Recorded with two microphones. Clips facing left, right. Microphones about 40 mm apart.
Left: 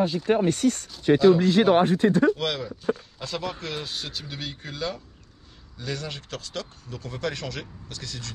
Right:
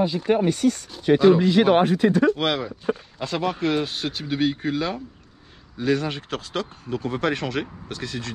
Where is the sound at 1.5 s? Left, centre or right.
Right.